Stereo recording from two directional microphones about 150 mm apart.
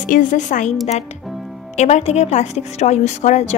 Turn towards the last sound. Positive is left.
turn(degrees=50)  # may be behind; listen again after turning